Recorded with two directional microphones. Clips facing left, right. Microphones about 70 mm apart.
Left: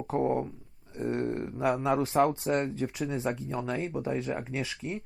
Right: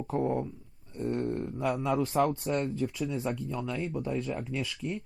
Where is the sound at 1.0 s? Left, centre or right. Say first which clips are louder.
Left 1 dB; left.